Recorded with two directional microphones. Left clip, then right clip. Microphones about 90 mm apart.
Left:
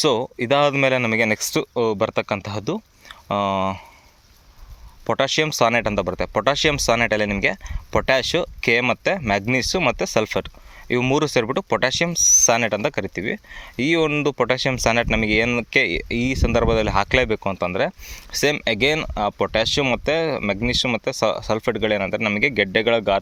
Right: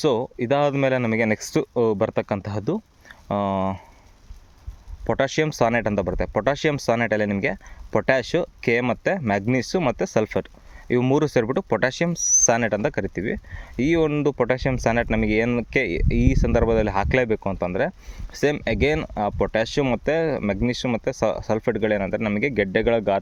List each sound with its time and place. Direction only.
0.0 s speech: 25° right (ahead or behind); by 3.8 s 40° right (ahead or behind)
5.0 s speech: 50° right (ahead or behind)